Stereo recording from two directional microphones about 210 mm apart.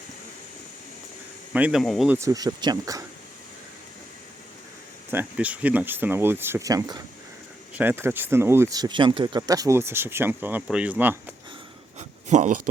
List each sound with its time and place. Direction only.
1.5 s speech: 5° right (ahead or behind)
2.1 s speech: 15° right (ahead or behind)
5.1 s speech: 5° right (ahead or behind)
11.9 s a sound: 35° right (ahead or behind)